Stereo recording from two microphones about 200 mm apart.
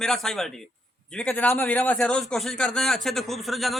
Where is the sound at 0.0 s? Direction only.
Centre (ahead or behind).